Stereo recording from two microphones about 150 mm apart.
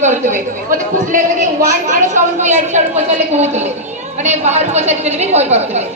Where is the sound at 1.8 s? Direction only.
55° right (ahead or behind).